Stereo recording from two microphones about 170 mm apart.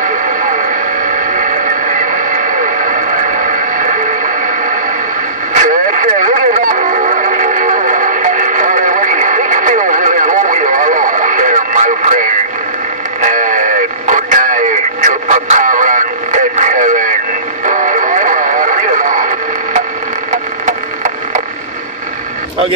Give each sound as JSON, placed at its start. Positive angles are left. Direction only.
{"t": 1.0, "sound": "vehicle", "side_deg": -50}
{"t": 3.7, "sound": "radio", "side_deg": -50}
{"t": 5.5, "sound": "music", "side_deg": -50}
{"t": 17.6, "sound": "radio", "side_deg": -50}
{"t": 20.6, "sound": "a sound", "side_deg": -45}